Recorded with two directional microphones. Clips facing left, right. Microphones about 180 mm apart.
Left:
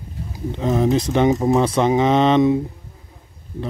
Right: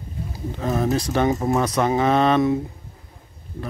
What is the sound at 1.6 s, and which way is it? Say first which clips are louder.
Speech: left 3 dB; 25° left (ahead or behind).